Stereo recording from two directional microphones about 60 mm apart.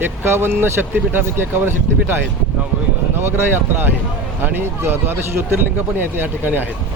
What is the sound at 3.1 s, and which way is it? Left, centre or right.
Speech, right.